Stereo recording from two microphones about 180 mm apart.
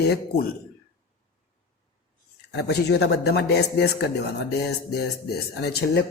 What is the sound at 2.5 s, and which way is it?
A woman's voice, 65° left (ahead or behind).